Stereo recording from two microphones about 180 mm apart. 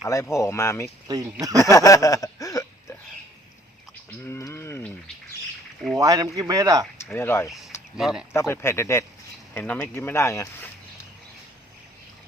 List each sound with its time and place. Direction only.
0.0 s speech: 15° left (ahead or behind)
1.0 s speech: 20° right (ahead or behind)
1.7 s a sound: 20° left (ahead or behind)
4.3 s a sound: 15° left (ahead or behind)
6.0 s speech: 20° right (ahead or behind)
7.0 s speech: 15° left (ahead or behind)
7.9 s speech: 5° right (ahead or behind)
8.3 s speech: 15° left (ahead or behind)